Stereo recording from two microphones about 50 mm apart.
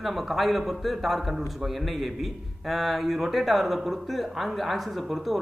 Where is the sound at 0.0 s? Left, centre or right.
Centre.